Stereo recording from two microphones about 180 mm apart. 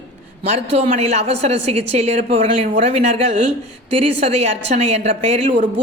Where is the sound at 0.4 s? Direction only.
35° right (ahead or behind).